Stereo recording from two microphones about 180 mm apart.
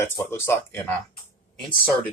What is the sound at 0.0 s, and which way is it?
Speech, 15° left (ahead or behind).